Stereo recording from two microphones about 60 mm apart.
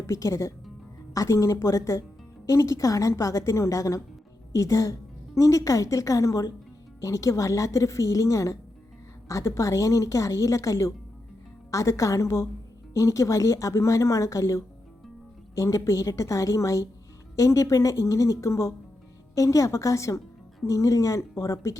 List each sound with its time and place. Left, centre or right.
0.1 s a woman's voice: left